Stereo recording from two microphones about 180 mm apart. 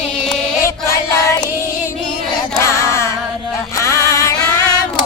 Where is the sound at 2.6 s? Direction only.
15° left (ahead or behind).